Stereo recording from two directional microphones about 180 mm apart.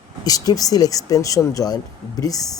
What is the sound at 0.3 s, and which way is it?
Speech, 20° left (ahead or behind).